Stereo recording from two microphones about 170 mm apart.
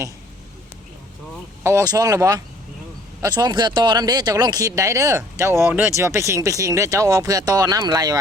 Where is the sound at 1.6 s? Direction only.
20° right (ahead or behind).